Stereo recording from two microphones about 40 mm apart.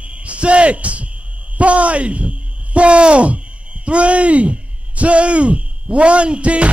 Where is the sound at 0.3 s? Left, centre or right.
Right.